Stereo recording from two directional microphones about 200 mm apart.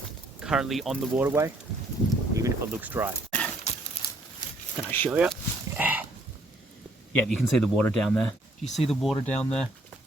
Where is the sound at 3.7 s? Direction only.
35° left (ahead or behind).